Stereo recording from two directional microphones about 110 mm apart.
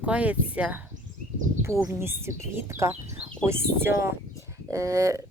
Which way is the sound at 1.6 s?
25° right (ahead or behind).